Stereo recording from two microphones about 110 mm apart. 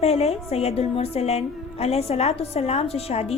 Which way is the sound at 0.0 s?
70° left (ahead or behind).